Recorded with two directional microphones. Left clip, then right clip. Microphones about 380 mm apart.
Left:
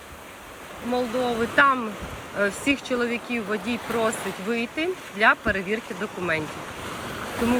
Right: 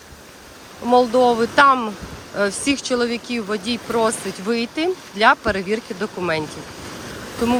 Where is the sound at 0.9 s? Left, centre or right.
Centre.